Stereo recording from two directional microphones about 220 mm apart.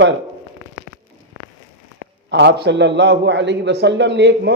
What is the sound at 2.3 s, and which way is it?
A man's voice, 50° right (ahead or behind).